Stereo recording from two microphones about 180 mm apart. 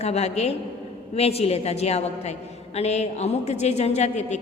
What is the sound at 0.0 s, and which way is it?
A woman's voice, 35° left (ahead or behind).